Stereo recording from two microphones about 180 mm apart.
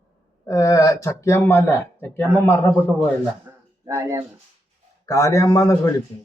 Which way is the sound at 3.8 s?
15° right (ahead or behind).